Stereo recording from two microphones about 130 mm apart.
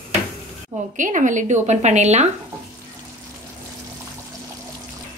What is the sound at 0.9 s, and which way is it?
A woman's voice, 75° right (ahead or behind).